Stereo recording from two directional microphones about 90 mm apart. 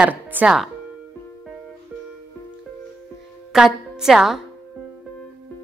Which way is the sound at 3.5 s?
5° right (ahead or behind).